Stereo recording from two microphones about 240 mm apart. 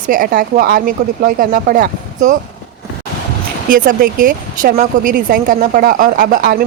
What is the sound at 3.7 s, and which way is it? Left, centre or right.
A woman's voice, right.